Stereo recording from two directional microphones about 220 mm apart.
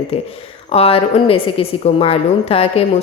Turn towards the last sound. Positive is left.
turn(degrees=25)  # may be behind; listen again after turning